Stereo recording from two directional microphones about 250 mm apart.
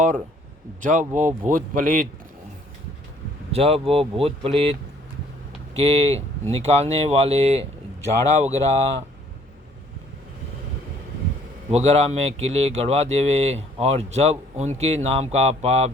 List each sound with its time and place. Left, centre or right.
0.8 s speech: right
3.5 s speech: right
11.7 s speech: right